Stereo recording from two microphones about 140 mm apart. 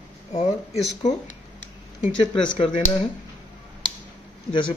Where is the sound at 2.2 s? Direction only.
35° left (ahead or behind).